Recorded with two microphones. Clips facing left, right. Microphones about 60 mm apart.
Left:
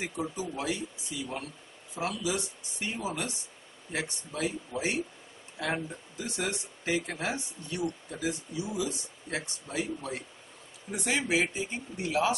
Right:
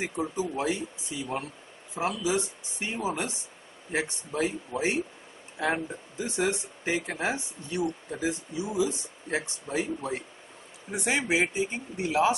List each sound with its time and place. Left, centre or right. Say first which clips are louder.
0.0 s speech: right 4 dB; right